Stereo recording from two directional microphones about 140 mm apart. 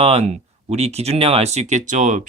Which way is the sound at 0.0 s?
45° right (ahead or behind).